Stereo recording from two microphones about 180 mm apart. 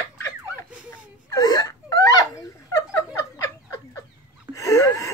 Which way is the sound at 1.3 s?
20° left (ahead or behind).